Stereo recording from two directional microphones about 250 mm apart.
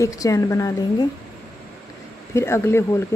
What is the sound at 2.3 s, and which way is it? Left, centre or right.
Speech, centre.